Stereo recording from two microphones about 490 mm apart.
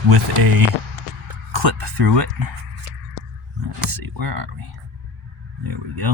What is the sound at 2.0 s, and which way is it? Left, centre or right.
Speech, right.